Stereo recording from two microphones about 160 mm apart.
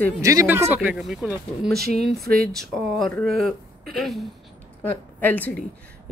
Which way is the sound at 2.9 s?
Centre (ahead or behind).